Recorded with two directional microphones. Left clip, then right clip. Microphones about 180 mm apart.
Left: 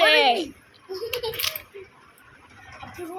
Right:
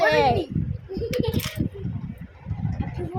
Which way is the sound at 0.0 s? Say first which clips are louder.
Left 2 dB; 10° right (ahead or behind).